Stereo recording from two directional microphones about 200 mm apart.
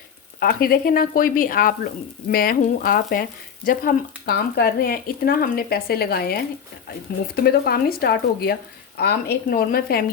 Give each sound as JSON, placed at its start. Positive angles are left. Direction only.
{"t": 0.3, "sound": "speech", "side_deg": 50}